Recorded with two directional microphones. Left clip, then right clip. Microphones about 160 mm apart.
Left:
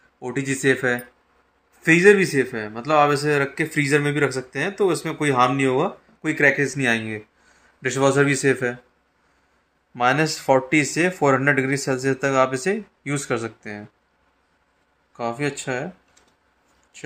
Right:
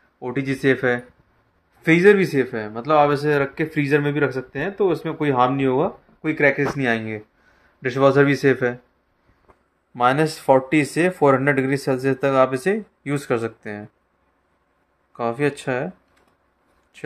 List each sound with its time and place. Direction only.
0.2 s a man's voice: 15° right (ahead or behind)
9.9 s a man's voice: 15° right (ahead or behind)
15.1 s a man's voice: 20° right (ahead or behind)
16.9 s a sound: 20° right (ahead or behind)